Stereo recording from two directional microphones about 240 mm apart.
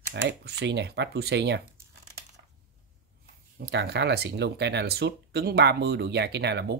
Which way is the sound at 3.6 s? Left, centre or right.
Right.